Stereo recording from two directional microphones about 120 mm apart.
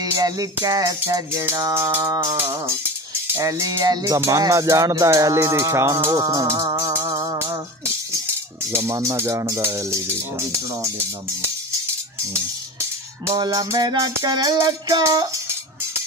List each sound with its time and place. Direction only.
0.2 s music: 30° right (ahead or behind)
1.0 s speech: 20° right (ahead or behind)
3.9 s music: 30° right (ahead or behind)
4.2 s speech: 30° right (ahead or behind)
8.1 s speech: 20° right (ahead or behind)
13.3 s music: 30° right (ahead or behind)